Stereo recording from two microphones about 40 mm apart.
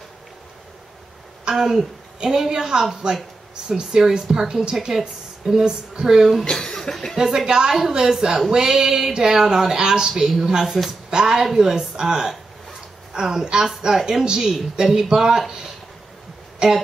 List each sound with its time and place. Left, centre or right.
1.5 s speech: centre
6.5 s speech: centre
7.2 s speech: centre